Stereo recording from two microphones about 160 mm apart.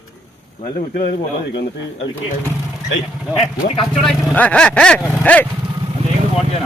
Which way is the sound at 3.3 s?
35° left (ahead or behind).